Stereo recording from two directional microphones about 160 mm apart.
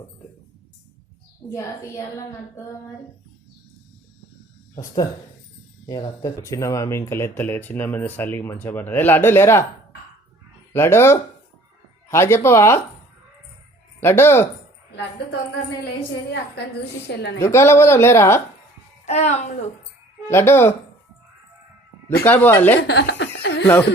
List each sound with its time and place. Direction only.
1.5 s a woman's voice: 20° left (ahead or behind)
5.9 s speech: 25° left (ahead or behind)
10.7 s speech: 15° left (ahead or behind)
14.0 s speech: 15° left (ahead or behind)
16.6 s a woman's voice: 90° left
17.4 s speech: 15° left (ahead or behind)
19.0 s a woman's voice: 45° left (ahead or behind)
20.3 s speech: 15° left (ahead or behind)
22.2 s speech: 10° left (ahead or behind)
22.8 s chuckle: 90° left